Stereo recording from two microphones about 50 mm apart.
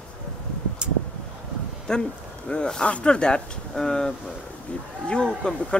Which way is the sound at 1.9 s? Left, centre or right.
Centre.